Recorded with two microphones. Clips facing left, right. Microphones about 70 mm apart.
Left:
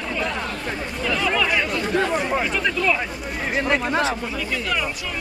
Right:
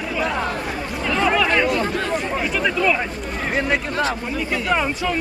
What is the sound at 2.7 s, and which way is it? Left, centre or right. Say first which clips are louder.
Speech: right 3 dB; centre.